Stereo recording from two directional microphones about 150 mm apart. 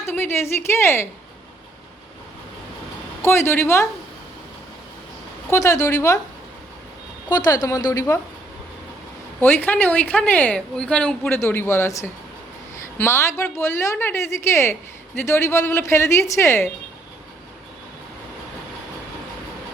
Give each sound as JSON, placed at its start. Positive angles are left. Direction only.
{"t": 0.0, "sound": "speech", "side_deg": 15}
{"t": 3.2, "sound": "speech", "side_deg": 15}
{"t": 5.5, "sound": "a woman's voice", "side_deg": 20}
{"t": 7.3, "sound": "a woman's voice", "side_deg": 25}
{"t": 9.4, "sound": "a woman's voice", "side_deg": 15}